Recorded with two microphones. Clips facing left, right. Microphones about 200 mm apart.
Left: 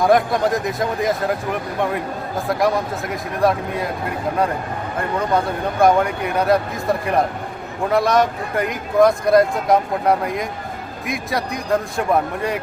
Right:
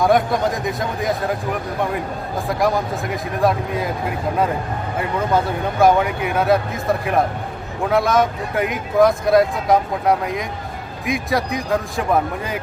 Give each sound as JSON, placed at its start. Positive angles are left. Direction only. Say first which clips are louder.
{"t": 0.0, "sound": "speech", "louder": "left 1 dB", "side_deg": 0}
{"t": 2.5, "sound": "speech", "louder": "even", "side_deg": 0}
{"t": 4.9, "sound": "speech", "louder": "even", "side_deg": 0}